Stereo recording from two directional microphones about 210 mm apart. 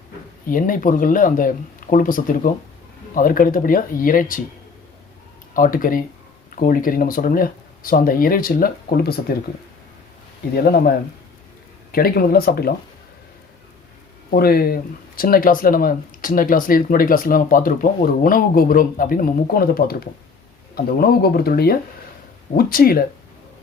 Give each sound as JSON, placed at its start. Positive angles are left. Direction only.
{"t": 0.4, "sound": "speech", "side_deg": 40}
{"t": 5.5, "sound": "speech", "side_deg": 40}
{"t": 10.5, "sound": "speech", "side_deg": 45}
{"t": 14.3, "sound": "speech", "side_deg": 45}